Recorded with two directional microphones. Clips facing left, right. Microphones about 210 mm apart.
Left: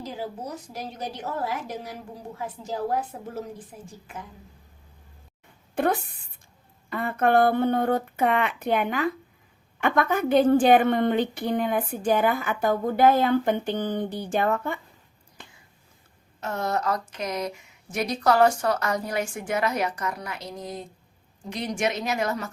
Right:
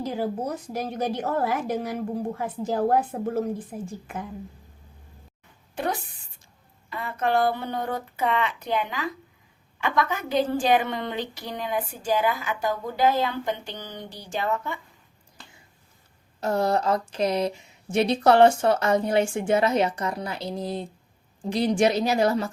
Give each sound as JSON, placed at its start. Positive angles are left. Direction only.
{"t": 0.0, "sound": "a woman's voice", "side_deg": -55}
{"t": 5.7, "sound": "a woman's voice", "side_deg": 55}
{"t": 16.4, "sound": "a woman's voice", "side_deg": -35}